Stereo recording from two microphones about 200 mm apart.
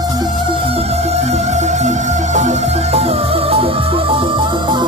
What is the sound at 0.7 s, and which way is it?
Music, 30° right (ahead or behind).